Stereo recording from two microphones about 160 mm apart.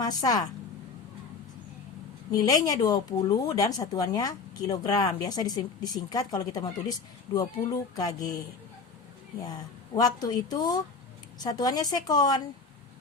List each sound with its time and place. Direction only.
0.0 s a woman's voice: 25° left (ahead or behind)
2.3 s speech: 20° left (ahead or behind)
9.4 s speech: 25° left (ahead or behind)